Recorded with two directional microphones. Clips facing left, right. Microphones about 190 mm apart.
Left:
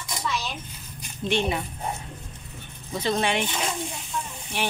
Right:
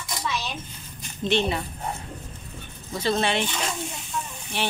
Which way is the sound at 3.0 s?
15° left (ahead or behind).